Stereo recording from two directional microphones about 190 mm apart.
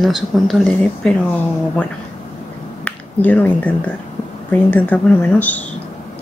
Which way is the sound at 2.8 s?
10° left (ahead or behind).